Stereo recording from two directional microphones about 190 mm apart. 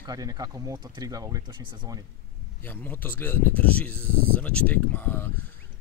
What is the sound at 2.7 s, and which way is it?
Speech, 10° left (ahead or behind).